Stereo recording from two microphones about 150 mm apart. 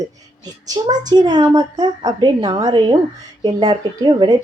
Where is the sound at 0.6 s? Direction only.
25° right (ahead or behind).